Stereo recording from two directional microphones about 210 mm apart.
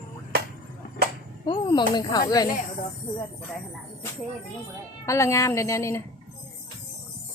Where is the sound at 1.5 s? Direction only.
20° left (ahead or behind).